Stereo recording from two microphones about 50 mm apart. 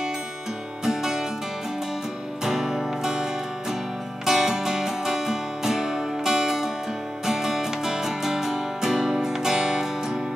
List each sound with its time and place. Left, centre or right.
0.8 s music: centre
2.4 s music: centre
4.3 s music: centre